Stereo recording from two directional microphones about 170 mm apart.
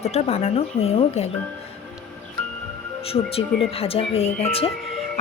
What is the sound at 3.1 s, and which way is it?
A woman's voice, 35° left (ahead or behind).